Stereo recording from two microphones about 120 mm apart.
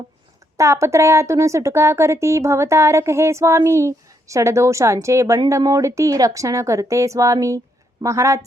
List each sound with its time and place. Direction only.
0.5 s speech: 25° right (ahead or behind)